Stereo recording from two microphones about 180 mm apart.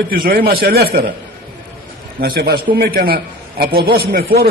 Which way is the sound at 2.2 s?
60° right (ahead or behind).